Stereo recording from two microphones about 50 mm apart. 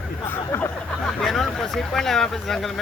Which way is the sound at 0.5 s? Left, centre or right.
Left.